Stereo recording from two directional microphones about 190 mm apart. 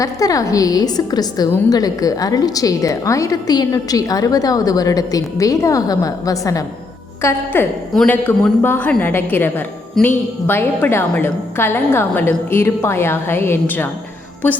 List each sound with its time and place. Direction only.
0.0 s a woman's voice: 20° left (ahead or behind)